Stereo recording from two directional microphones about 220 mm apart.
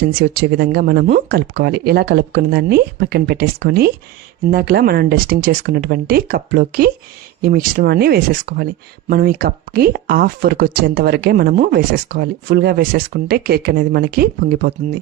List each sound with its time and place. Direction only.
0.1 s speech: 45° right (ahead or behind)